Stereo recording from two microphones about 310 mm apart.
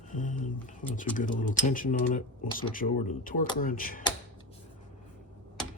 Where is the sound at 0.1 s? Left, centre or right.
Left.